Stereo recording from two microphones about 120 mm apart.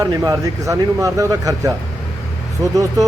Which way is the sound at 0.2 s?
25° right (ahead or behind).